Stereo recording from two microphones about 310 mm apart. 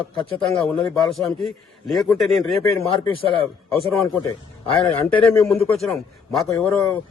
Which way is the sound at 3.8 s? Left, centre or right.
Centre.